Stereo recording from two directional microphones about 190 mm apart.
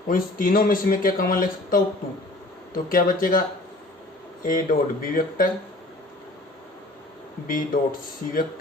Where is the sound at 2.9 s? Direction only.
45° left (ahead or behind).